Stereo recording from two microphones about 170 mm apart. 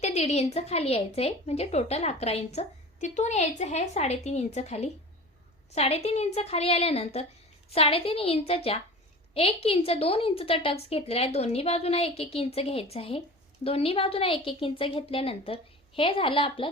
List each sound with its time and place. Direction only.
0.0 s speech: 40° left (ahead or behind)